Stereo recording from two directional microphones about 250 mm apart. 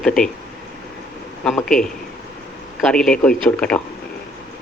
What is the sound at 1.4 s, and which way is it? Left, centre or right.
Speech, centre.